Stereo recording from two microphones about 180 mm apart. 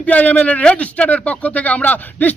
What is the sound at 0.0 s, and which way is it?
Speech, 10° left (ahead or behind).